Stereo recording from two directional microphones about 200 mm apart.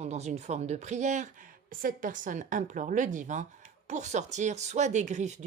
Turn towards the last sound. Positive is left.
turn(degrees=-35)  # may be behind; listen again after turning